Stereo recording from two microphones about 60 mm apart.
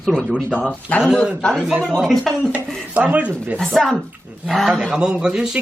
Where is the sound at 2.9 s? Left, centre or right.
Right.